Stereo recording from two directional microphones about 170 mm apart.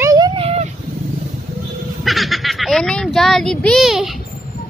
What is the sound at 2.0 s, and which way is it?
Speech, centre (ahead or behind).